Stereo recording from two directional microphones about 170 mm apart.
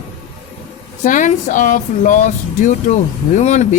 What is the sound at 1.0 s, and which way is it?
Speech, 50° left (ahead or behind).